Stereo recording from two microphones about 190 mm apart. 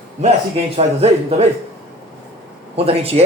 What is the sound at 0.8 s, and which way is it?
Speech, 30° right (ahead or behind).